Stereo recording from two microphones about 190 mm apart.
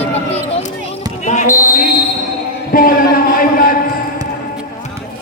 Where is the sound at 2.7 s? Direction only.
50° left (ahead or behind).